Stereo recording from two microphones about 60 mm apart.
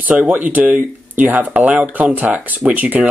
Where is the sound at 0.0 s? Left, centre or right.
Right.